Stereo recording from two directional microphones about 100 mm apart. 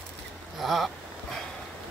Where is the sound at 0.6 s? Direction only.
Centre (ahead or behind).